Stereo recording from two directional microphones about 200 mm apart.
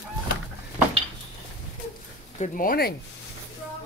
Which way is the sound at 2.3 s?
40° left (ahead or behind).